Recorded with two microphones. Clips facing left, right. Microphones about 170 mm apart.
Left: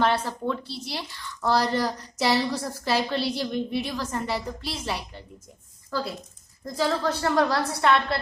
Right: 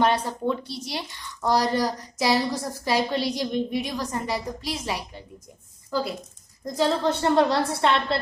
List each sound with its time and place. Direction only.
0.0 s a woman's voice: 15° right (ahead or behind)